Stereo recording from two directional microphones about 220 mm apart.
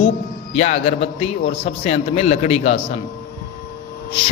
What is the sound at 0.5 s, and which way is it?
A man's voice, 30° left (ahead or behind).